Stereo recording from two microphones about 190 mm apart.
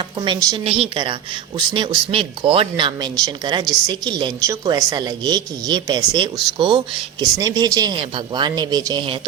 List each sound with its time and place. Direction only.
0.2 s speech: 25° right (ahead or behind)